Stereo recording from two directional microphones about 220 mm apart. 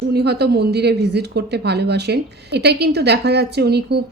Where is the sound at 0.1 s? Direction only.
45° right (ahead or behind).